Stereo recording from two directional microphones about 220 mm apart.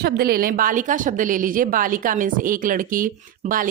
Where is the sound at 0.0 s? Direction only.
45° right (ahead or behind).